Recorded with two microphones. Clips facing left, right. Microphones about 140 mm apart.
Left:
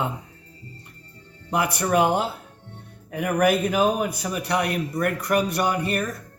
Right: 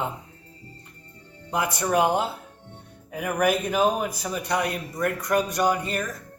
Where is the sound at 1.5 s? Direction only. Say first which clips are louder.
Left 2 dB; 65° left (ahead or behind).